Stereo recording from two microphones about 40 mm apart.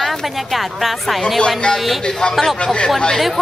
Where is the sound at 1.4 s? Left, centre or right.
Left.